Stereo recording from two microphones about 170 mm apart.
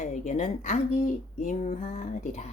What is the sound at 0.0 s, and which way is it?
Speech, 45° left (ahead or behind).